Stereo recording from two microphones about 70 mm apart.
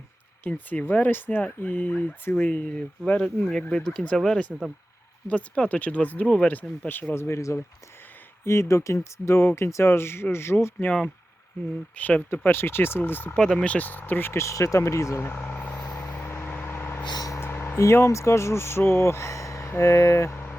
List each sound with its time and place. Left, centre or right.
0.4 s speech: left
11.9 s speech: left
12.5 s speech: left
13.3 s speech: centre
13.7 s speech: left
15.2 s vehicle: left
17.0 s vehicle: left
17.4 s speech: left